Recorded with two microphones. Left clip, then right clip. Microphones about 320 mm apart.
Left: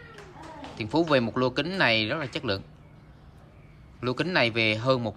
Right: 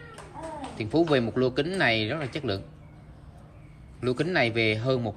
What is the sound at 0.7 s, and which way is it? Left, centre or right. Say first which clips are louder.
Speech: even; centre.